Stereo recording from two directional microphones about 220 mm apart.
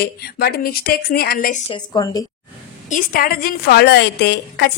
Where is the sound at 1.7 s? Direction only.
15° left (ahead or behind).